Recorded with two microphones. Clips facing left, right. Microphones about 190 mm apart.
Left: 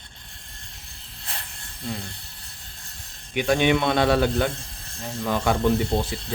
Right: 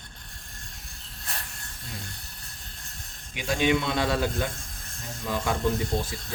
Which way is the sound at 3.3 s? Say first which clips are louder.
Left 4 dB; 60° left (ahead or behind).